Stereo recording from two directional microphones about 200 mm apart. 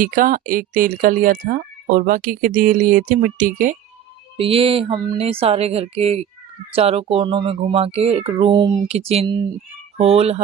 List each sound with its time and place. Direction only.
0.0 s speech: 45° right (ahead or behind)
4.4 s speech: 25° right (ahead or behind)